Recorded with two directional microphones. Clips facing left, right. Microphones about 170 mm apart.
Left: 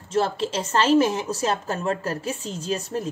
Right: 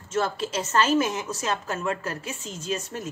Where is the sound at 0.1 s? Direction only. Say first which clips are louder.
Left 3 dB; 30° left (ahead or behind).